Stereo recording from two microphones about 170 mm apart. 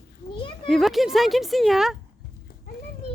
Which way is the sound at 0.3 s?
30° left (ahead or behind).